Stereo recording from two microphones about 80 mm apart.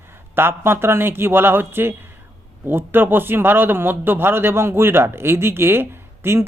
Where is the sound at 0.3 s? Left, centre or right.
Right.